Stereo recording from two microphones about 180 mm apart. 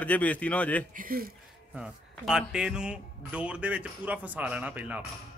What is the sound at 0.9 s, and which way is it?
Speech, 50° right (ahead or behind).